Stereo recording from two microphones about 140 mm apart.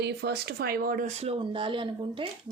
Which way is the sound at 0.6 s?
90° right.